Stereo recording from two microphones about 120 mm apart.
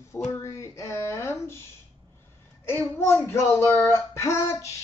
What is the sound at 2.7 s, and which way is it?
Speech, 20° left (ahead or behind).